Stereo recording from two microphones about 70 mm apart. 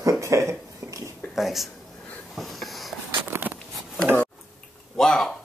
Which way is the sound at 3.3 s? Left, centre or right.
Right.